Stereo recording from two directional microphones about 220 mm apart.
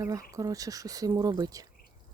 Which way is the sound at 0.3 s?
15° right (ahead or behind).